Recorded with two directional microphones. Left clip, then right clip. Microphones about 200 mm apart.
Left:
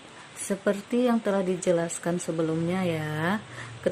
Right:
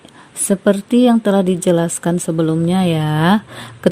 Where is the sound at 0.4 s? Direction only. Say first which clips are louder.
Right 12 dB; 35° right (ahead or behind).